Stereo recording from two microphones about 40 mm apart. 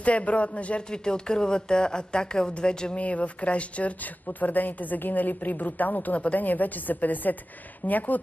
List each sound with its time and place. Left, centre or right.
0.0 s a man's voice: left
0.8 s speech: centre
3.0 s speech: left